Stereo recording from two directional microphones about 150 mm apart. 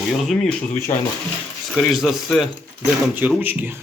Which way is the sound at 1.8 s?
Centre (ahead or behind).